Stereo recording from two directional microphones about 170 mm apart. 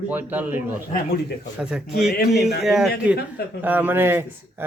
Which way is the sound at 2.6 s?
5° right (ahead or behind).